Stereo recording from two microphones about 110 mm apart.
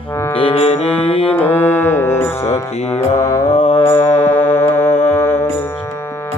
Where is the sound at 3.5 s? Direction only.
55° left (ahead or behind).